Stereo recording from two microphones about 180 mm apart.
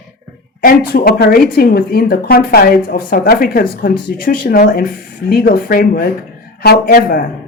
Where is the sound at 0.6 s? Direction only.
55° left (ahead or behind).